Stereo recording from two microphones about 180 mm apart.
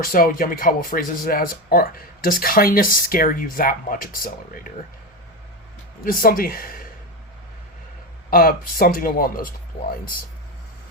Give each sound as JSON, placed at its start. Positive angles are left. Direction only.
{"t": 0.0, "sound": "speech", "side_deg": 50}
{"t": 6.1, "sound": "speech", "side_deg": 55}
{"t": 8.3, "sound": "speech", "side_deg": 55}